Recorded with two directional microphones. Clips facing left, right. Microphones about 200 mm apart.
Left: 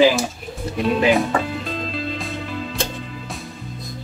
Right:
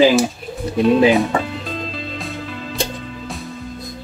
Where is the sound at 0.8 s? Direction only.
Centre (ahead or behind).